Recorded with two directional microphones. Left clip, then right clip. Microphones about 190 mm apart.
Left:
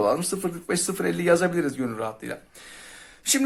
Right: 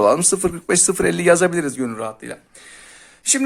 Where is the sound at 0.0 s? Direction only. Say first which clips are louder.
Right 8 dB; 40° right (ahead or behind).